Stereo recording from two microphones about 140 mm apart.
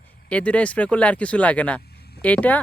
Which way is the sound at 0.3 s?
10° left (ahead or behind).